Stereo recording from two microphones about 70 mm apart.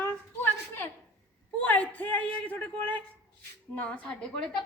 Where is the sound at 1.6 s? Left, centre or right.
Left.